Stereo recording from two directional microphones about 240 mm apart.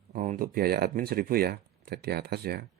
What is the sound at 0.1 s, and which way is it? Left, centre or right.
Speech, right.